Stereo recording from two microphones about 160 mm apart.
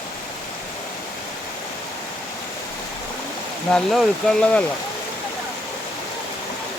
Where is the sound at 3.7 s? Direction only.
5° left (ahead or behind).